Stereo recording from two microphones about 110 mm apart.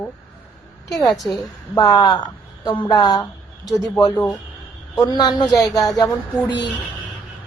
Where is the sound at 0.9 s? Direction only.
35° left (ahead or behind).